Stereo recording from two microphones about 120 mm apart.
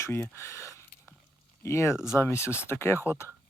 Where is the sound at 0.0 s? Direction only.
20° left (ahead or behind).